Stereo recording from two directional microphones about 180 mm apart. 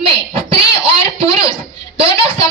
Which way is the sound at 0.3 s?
30° right (ahead or behind).